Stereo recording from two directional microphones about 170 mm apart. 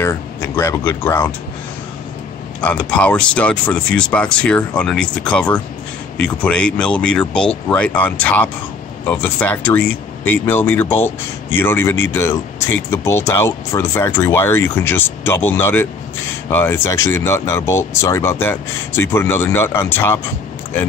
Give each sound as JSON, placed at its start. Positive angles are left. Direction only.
{"t": 0.0, "sound": "speech", "side_deg": 15}
{"t": 2.6, "sound": "speech", "side_deg": 10}